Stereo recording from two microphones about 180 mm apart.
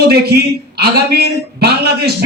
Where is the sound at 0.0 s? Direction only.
60° right (ahead or behind).